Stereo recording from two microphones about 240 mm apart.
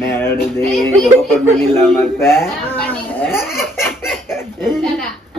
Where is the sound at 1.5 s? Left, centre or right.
Centre.